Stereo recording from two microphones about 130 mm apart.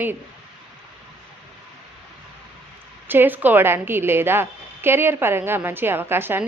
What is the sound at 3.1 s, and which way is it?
A woman's voice, 15° right (ahead or behind).